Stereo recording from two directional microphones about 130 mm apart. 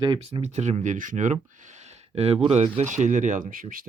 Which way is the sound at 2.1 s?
50° right (ahead or behind).